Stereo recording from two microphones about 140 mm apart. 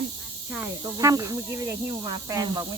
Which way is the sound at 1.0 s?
25° right (ahead or behind).